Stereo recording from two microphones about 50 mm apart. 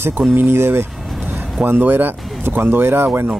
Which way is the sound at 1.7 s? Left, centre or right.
Right.